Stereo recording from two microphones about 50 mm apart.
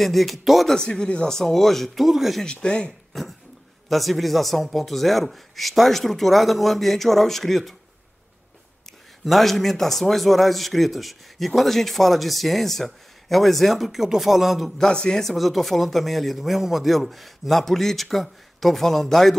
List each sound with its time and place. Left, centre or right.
0.0 s a man's voice: centre
0.7 s speech: centre
1.3 s a man's voice: centre
2.4 s speech: centre
3.9 s a man's voice: centre
9.2 s a man's voice: centre
14.8 s speech: centre
15.3 s a man's voice: centre